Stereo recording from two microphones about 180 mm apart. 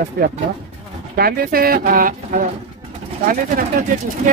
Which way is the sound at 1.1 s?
55° right (ahead or behind).